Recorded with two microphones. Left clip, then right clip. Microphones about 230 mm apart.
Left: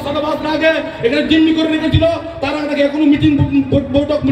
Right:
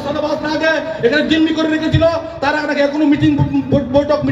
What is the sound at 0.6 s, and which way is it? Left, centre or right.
A man's voice, right.